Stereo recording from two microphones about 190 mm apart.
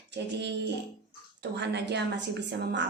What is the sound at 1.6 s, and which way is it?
A woman's voice, 65° right (ahead or behind).